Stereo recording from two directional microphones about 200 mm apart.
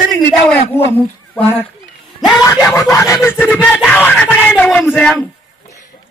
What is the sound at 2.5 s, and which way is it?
Speech, 15° left (ahead or behind).